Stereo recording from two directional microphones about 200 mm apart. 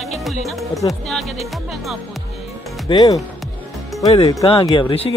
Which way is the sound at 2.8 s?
20° left (ahead or behind).